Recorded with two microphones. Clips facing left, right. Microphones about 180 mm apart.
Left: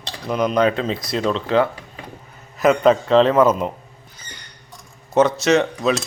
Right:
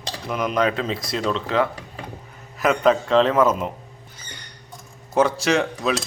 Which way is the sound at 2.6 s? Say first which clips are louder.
Left 4 dB; centre (ahead or behind).